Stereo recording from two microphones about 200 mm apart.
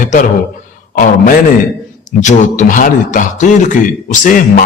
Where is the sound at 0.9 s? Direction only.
45° left (ahead or behind).